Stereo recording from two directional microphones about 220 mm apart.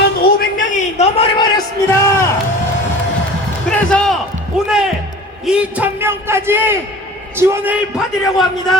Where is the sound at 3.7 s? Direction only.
Centre (ahead or behind).